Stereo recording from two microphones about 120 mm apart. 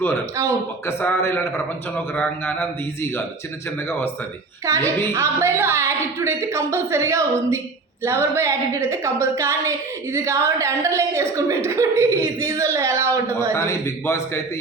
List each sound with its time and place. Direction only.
0.9 s a man's voice: 20° left (ahead or behind)
4.6 s a woman's voice: 25° right (ahead or behind)
13.5 s a man's voice: 20° left (ahead or behind)